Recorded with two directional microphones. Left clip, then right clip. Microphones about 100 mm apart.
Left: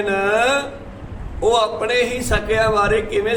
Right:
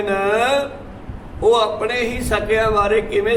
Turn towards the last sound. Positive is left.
turn(degrees=25)  # may be behind; listen again after turning